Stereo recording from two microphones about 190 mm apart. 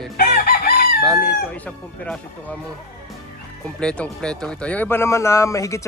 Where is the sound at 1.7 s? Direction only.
5° left (ahead or behind).